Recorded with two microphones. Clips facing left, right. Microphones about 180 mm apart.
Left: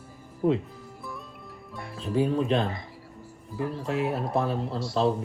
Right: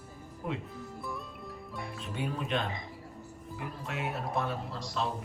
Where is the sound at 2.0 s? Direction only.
35° left (ahead or behind).